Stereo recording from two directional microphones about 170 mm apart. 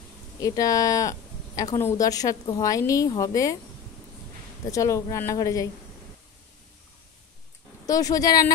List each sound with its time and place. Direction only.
0.4 s a woman's voice: 20° left (ahead or behind)
4.6 s a woman's voice: 20° left (ahead or behind)
7.8 s a woman's voice: 20° left (ahead or behind)